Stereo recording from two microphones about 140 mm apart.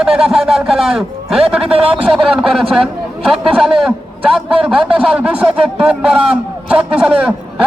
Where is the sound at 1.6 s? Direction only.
45° right (ahead or behind).